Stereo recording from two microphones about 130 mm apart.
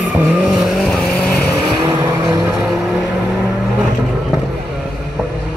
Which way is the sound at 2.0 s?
20° right (ahead or behind).